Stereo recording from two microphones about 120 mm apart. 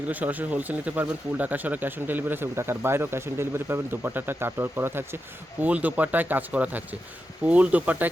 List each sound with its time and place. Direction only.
0.1 s speech: 15° right (ahead or behind)